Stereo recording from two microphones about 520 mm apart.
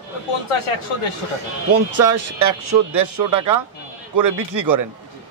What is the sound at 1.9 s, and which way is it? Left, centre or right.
A man's voice, right.